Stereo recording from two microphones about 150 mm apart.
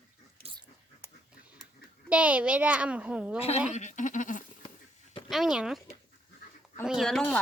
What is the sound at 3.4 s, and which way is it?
Speech, 45° left (ahead or behind).